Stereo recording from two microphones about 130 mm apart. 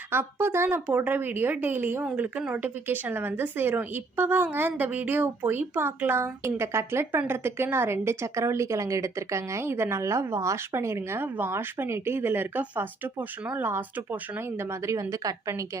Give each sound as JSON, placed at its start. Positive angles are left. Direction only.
{"t": 0.1, "sound": "a woman's voice", "side_deg": -15}